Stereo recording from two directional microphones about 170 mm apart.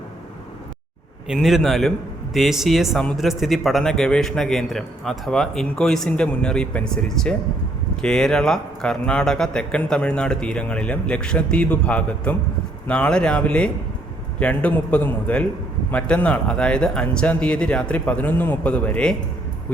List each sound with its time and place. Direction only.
1.3 s speech: centre (ahead or behind)